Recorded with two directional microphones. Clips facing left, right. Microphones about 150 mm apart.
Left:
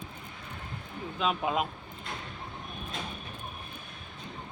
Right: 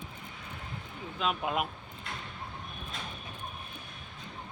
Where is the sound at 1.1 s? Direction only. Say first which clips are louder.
Left 2 dB; centre (ahead or behind).